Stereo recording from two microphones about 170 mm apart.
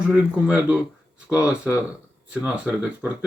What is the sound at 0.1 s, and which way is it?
Speech, 10° right (ahead or behind).